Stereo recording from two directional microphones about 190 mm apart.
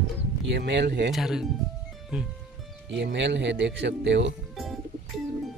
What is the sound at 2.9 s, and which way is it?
Speech, 70° right (ahead or behind).